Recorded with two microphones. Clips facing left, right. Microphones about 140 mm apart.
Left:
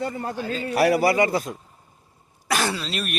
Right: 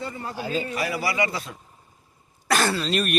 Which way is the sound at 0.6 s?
70° left (ahead or behind).